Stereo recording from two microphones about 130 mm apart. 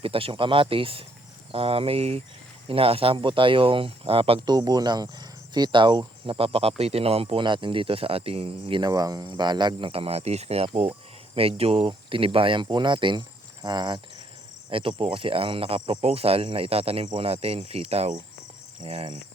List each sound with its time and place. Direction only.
0.0 s speech: 45° right (ahead or behind)